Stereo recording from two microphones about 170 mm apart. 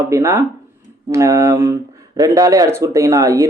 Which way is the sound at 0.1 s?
15° right (ahead or behind).